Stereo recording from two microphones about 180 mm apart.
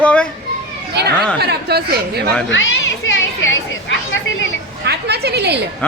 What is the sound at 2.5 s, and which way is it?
Children playing, 90° left.